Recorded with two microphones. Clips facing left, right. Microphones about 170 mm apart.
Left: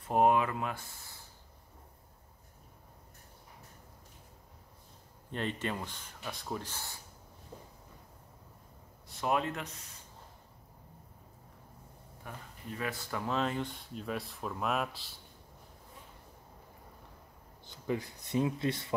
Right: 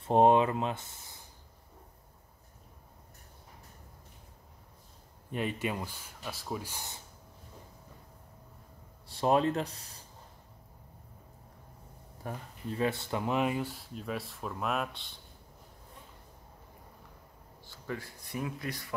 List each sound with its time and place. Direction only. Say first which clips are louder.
0.0 s speech: right 4 dB; 30° right (ahead or behind)
5.3 s speech: right 2 dB; 10° right (ahead or behind)
9.0 s speech: right 5 dB; 30° right (ahead or behind)
12.2 s speech: right 7 dB; 35° right (ahead or behind); by 15.1 s centre (ahead or behind)
17.6 s speech: left 5 dB; 20° left (ahead or behind)